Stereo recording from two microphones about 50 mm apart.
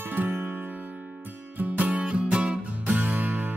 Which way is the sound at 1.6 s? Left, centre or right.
Right.